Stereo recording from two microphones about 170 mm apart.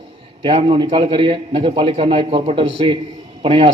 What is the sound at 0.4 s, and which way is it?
A man's voice, 30° right (ahead or behind).